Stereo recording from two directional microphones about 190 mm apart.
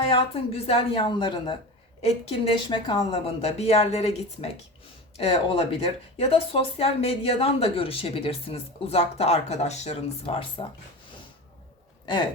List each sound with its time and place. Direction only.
0.1 s speech: 30° left (ahead or behind)